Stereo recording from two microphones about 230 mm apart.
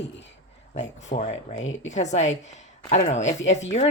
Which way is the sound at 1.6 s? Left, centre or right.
Left.